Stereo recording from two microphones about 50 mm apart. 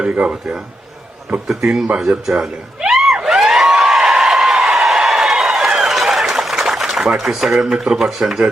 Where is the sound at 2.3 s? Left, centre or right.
Centre.